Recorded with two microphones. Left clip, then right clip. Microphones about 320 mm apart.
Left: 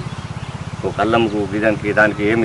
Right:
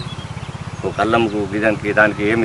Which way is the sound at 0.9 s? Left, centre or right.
Centre.